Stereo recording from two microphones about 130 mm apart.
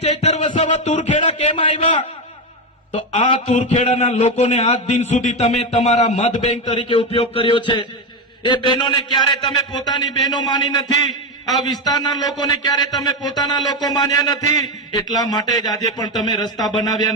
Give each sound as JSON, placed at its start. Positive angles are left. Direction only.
{"t": 0.0, "sound": "music", "side_deg": 55}
{"t": 0.6, "sound": "speech", "side_deg": 70}
{"t": 1.5, "sound": "a sound", "side_deg": 50}
{"t": 3.2, "sound": "a man's voice", "side_deg": 45}